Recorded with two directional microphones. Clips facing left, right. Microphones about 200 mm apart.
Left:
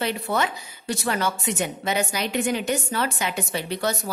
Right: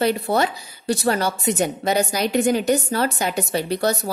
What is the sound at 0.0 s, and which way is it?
A woman's voice, 35° right (ahead or behind).